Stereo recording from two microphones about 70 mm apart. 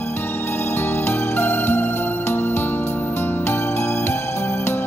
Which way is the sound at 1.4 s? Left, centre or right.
Left.